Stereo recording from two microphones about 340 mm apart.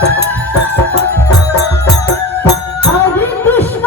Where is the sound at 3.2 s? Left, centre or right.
Centre.